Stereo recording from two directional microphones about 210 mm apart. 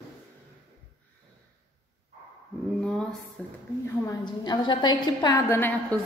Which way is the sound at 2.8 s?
5° left (ahead or behind).